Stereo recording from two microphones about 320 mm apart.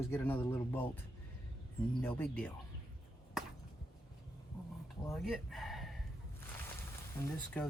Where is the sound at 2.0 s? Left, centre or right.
Centre.